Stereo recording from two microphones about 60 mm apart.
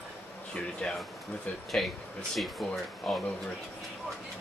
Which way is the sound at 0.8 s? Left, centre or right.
Centre.